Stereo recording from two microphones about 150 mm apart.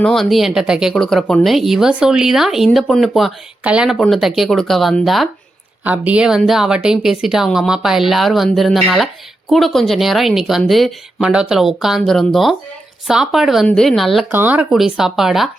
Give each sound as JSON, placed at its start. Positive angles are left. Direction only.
{"t": 0.0, "sound": "a woman's voice", "side_deg": 0}
{"t": 14.3, "sound": "a woman's voice", "side_deg": -15}